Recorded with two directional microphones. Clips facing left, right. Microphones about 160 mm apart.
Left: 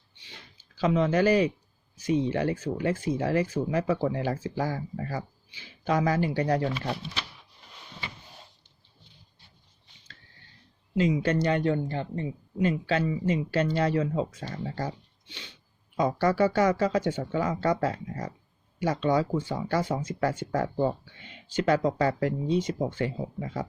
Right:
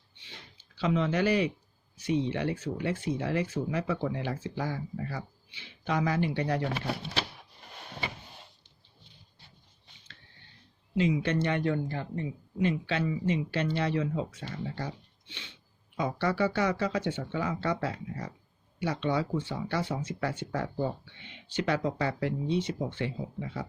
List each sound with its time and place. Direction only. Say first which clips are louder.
0.5 s speech: left 3 dB; 40° left (ahead or behind)
10.9 s a man's voice: left 3 dB; 40° left (ahead or behind)